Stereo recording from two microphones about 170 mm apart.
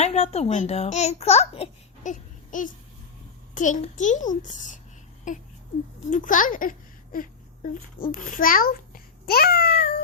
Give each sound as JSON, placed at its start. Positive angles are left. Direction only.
{"t": 0.0, "sound": "a child's voice", "side_deg": 40}
{"t": 2.1, "sound": "a sound", "side_deg": 50}
{"t": 3.5, "sound": "a child's voice", "side_deg": 45}
{"t": 8.1, "sound": "babbling", "side_deg": 55}